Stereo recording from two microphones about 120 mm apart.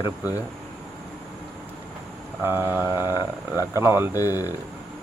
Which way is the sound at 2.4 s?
20° right (ahead or behind).